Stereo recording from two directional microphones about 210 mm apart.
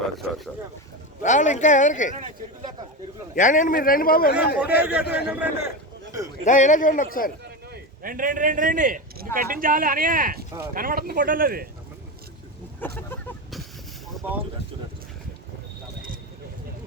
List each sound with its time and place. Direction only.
1.2 s a man's voice: 35° left (ahead or behind)
3.3 s a man's voice: 40° left (ahead or behind)
4.4 s a man's voice: 5° right (ahead or behind)
6.4 s a man's voice: 35° left (ahead or behind)
7.4 s speech: 45° right (ahead or behind)
13.0 s a sound: 10° left (ahead or behind)